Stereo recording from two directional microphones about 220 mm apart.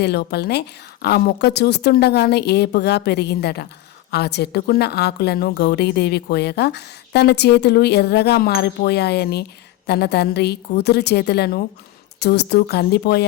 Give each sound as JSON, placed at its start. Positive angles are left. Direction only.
{"t": 0.0, "sound": "a woman's voice", "side_deg": 50}